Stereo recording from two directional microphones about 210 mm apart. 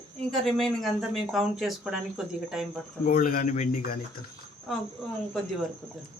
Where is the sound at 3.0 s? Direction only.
40° left (ahead or behind).